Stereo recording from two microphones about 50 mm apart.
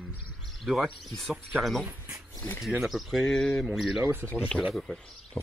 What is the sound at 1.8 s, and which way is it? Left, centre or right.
Speech, right.